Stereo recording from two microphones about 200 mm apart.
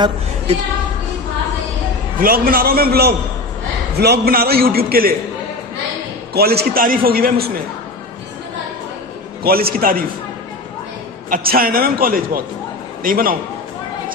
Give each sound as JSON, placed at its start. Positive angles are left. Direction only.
{"t": 2.1, "sound": "a man's voice", "side_deg": -45}
{"t": 6.3, "sound": "a man's voice", "side_deg": -50}
{"t": 9.4, "sound": "a man's voice", "side_deg": -50}
{"t": 11.2, "sound": "a man's voice", "side_deg": -45}